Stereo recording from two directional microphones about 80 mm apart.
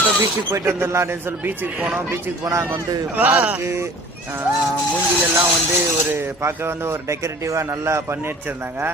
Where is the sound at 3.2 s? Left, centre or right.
Centre.